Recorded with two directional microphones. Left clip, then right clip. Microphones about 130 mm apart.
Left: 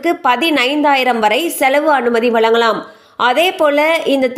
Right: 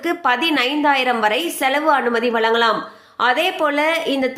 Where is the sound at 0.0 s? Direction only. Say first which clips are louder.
Left 4 dB; 40° left (ahead or behind).